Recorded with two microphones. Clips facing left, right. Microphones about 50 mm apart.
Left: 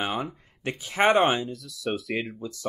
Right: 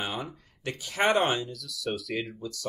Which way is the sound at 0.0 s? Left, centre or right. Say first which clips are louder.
Left 5 dB; centre.